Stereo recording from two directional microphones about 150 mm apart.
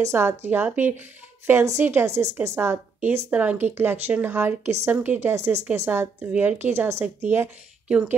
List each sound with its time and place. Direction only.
0.0 s a woman's voice: 15° right (ahead or behind)